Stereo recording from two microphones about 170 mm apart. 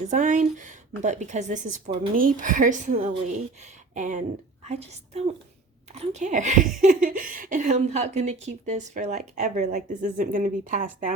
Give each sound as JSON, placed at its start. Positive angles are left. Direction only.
{"t": 0.1, "sound": "a woman's voice", "side_deg": -50}